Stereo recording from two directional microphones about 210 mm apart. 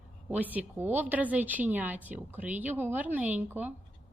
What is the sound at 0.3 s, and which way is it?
A woman's voice, 10° right (ahead or behind).